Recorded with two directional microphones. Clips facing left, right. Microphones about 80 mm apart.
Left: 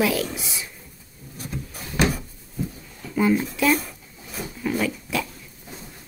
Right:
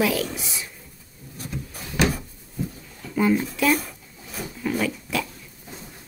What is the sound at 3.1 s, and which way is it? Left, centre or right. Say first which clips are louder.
Speech: even; centre.